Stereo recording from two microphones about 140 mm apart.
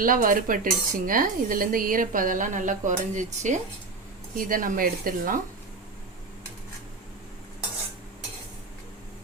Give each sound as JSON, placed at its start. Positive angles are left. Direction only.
{"t": 0.0, "sound": "dishes", "side_deg": -80}
{"t": 4.4, "sound": "speech", "side_deg": -80}